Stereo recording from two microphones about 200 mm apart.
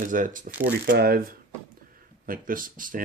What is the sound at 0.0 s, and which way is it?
Speech, 40° right (ahead or behind).